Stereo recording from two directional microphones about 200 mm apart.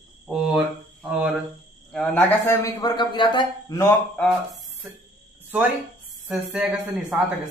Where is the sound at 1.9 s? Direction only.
10° left (ahead or behind).